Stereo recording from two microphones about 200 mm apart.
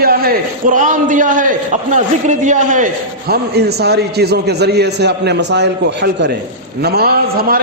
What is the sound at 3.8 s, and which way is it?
A man's voice, 55° right (ahead or behind).